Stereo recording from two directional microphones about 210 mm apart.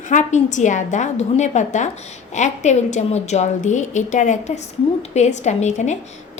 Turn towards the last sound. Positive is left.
turn(degrees=35)  # may be behind; listen again after turning